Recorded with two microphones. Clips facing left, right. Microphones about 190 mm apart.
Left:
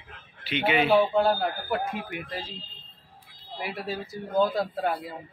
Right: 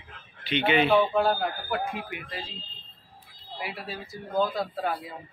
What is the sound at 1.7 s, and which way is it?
Speech, 45° left (ahead or behind).